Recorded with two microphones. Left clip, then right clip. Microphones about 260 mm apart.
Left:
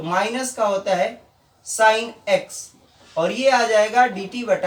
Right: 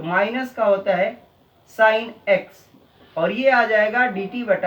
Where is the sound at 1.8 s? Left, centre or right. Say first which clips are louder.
Even; left.